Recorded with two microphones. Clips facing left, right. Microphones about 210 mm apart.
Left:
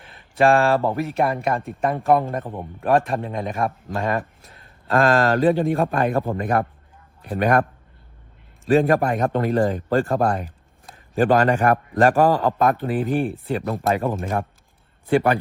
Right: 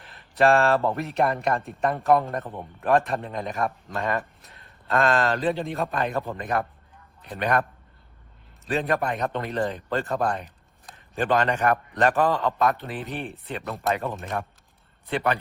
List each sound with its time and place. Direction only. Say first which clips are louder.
0.0 s speech: left 3 dB; centre (ahead or behind)
4.9 s a man's voice: left 5 dB; 40° left (ahead or behind)
8.6 s a man's voice: left 8 dB; 45° left (ahead or behind)